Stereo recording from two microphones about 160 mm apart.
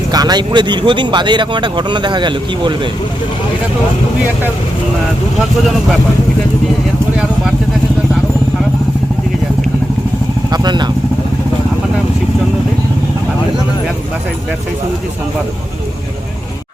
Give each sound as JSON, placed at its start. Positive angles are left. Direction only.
{"t": 0.1, "sound": "speech", "side_deg": -25}
{"t": 10.5, "sound": "speech", "side_deg": -25}